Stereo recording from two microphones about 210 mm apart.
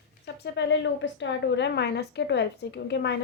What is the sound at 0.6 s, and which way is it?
A woman's voice, 60° left (ahead or behind).